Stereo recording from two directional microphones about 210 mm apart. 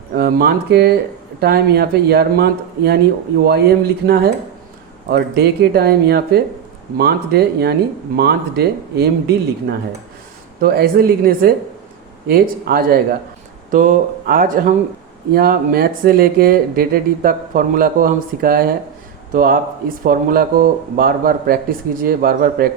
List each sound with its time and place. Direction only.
0.2 s speech: 50° right (ahead or behind)